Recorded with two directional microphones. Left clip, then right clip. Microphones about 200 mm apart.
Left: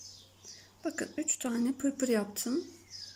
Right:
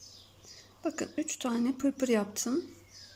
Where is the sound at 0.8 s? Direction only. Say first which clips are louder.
Right 2 dB; centre (ahead or behind).